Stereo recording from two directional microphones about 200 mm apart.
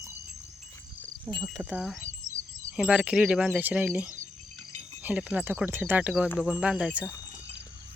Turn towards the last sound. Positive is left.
turn(degrees=-5)  # may be behind; listen again after turning